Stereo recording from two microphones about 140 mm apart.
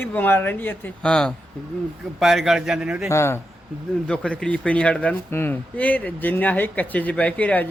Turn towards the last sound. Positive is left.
turn(degrees=10)  # may be behind; listen again after turning